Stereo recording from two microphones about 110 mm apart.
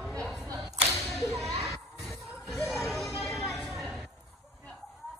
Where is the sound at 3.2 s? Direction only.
Centre (ahead or behind).